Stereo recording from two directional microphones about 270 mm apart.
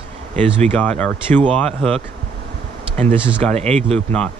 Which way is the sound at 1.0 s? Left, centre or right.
Centre.